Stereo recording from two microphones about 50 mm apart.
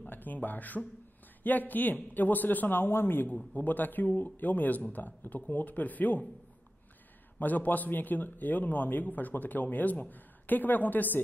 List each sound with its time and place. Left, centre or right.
0.0 s a man's voice: left
7.3 s a man's voice: left